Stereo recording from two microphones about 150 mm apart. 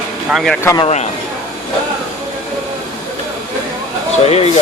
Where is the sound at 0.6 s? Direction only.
25° left (ahead or behind).